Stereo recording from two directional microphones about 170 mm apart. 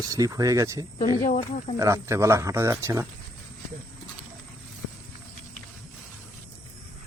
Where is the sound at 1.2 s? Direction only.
45° left (ahead or behind).